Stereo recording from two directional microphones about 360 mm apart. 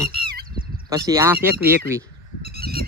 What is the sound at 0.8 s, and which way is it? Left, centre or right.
Speech, centre.